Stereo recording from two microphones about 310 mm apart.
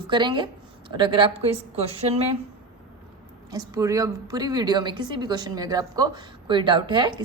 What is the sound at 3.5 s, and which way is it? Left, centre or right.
A woman's voice, centre.